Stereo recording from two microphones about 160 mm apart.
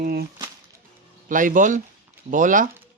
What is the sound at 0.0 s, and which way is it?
Speech, 70° right (ahead or behind).